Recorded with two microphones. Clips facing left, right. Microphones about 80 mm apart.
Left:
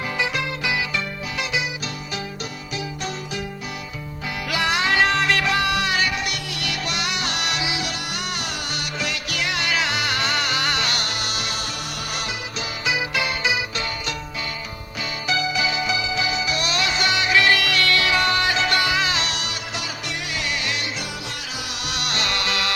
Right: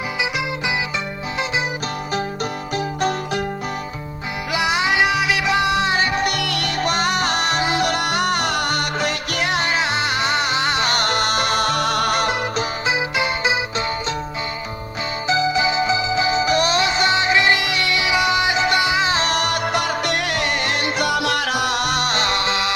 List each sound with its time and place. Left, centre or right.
2.7 s music: right
4.5 s music: centre
6.4 s music: right
6.7 s music: right
10.9 s music: right
12.8 s music: right
15.3 s music: right
19.1 s music: right